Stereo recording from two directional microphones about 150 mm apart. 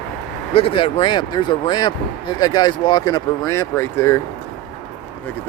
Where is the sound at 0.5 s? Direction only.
35° left (ahead or behind); by 4.2 s 20° left (ahead or behind).